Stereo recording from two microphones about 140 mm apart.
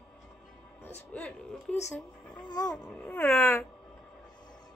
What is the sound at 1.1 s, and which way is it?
Speech, 5° left (ahead or behind).